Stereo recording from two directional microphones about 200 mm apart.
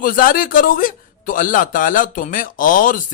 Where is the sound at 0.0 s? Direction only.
45° left (ahead or behind).